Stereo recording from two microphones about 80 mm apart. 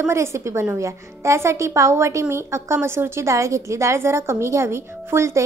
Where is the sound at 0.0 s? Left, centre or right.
Right.